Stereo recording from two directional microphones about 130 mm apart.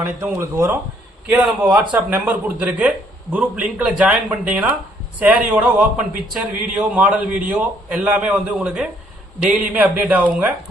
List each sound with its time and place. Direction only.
0.0 s speech: 20° right (ahead or behind)